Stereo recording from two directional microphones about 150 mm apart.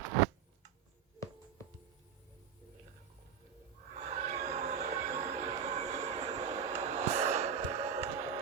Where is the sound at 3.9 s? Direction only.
50° right (ahead or behind).